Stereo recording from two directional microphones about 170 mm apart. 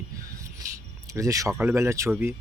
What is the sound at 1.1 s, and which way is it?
Speech, 20° right (ahead or behind).